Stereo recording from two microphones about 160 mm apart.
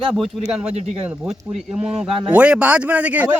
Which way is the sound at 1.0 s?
5° right (ahead or behind).